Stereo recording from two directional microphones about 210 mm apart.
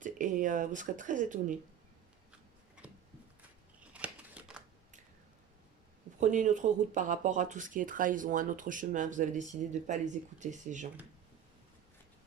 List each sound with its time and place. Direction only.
0.0 s speech: 35° right (ahead or behind)
3.9 s scissors: 5° right (ahead or behind)
6.1 s speech: 35° right (ahead or behind)